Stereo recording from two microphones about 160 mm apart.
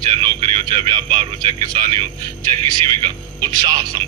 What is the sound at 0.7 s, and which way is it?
Speech, 30° right (ahead or behind).